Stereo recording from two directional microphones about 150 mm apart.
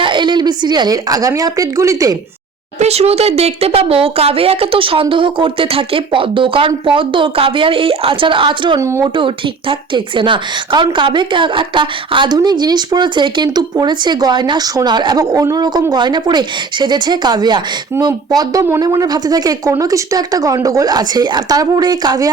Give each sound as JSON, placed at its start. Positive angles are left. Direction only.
{"t": 0.0, "sound": "a woman's voice", "side_deg": -30}
{"t": 2.7, "sound": "speech", "side_deg": -45}
{"t": 8.8, "sound": "a woman's voice", "side_deg": -20}
{"t": 9.1, "sound": "a woman's voice", "side_deg": -35}